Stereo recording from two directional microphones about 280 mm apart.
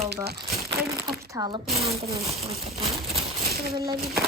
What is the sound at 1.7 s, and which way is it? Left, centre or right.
Speech, right.